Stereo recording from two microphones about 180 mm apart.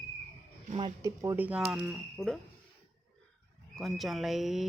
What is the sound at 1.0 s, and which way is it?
Speech, 15° right (ahead or behind).